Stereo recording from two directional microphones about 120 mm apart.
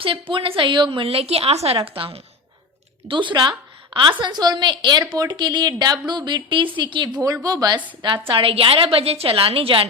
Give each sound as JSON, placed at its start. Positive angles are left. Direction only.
{"t": 0.0, "sound": "a woman's voice", "side_deg": -45}
{"t": 7.2, "sound": "speech", "side_deg": -30}
{"t": 8.3, "sound": "a woman's voice", "side_deg": -50}